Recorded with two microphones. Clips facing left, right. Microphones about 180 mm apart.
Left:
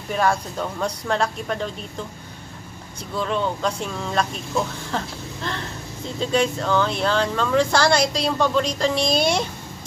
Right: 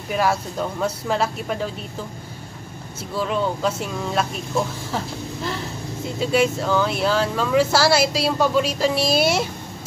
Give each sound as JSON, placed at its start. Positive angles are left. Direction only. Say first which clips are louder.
{"t": 0.1, "sound": "speech", "louder": "even", "side_deg": -5}
{"t": 3.2, "sound": "speech", "louder": "right 1 dB", "side_deg": -5}